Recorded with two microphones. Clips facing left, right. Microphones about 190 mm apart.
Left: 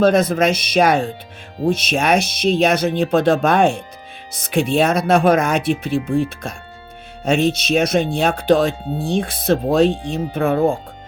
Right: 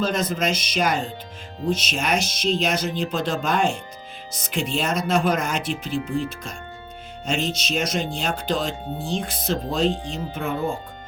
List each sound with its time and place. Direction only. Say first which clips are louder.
0.0 s speech: left 9 dB; 65° left (ahead or behind)